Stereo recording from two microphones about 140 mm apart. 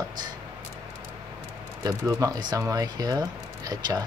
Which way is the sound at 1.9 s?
25° right (ahead or behind).